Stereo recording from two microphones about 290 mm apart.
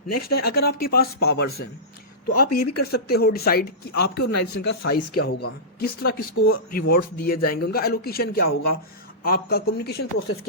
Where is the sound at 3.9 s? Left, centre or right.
Left.